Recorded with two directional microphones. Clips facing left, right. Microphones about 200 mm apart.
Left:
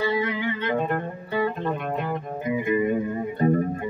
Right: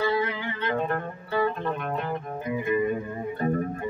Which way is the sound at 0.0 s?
15° left (ahead or behind).